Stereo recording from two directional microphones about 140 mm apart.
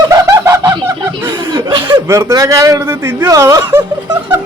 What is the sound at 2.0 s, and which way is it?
A man's voice, 20° right (ahead or behind).